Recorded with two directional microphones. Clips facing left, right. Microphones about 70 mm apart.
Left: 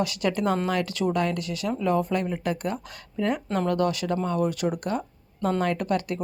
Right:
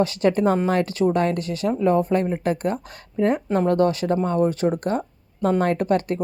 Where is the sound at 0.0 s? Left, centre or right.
Right.